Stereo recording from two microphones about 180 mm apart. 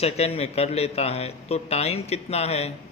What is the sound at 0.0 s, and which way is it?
Speech, 35° left (ahead or behind).